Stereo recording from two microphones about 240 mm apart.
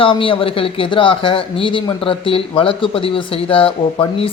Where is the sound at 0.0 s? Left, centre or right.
Left.